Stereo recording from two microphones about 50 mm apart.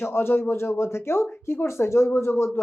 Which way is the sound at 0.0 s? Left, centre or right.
Left.